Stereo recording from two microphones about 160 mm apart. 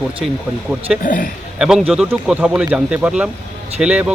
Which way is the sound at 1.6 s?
5° right (ahead or behind).